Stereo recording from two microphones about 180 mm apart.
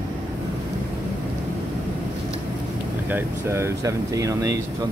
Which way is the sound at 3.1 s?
15° right (ahead or behind).